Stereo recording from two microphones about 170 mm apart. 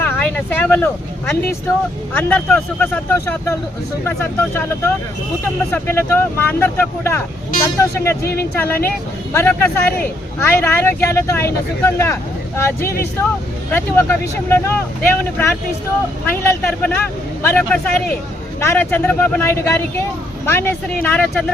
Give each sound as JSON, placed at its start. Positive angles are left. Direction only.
{"t": 0.0, "sound": "vehicle", "side_deg": 15}
{"t": 2.1, "sound": "speech", "side_deg": 10}
{"t": 5.7, "sound": "speech", "side_deg": 15}